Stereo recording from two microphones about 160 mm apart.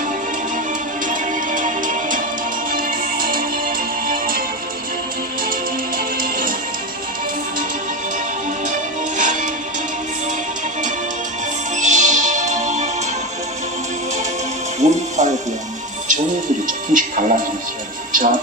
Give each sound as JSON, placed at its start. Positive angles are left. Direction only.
{"t": 1.0, "sound": "music", "side_deg": -55}
{"t": 6.0, "sound": "music", "side_deg": -65}
{"t": 8.6, "sound": "music", "side_deg": -55}
{"t": 11.8, "sound": "music", "side_deg": -50}
{"t": 14.8, "sound": "music", "side_deg": -45}
{"t": 16.6, "sound": "music", "side_deg": -55}